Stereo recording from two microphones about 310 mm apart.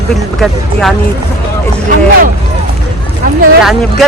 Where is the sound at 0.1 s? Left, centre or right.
Centre.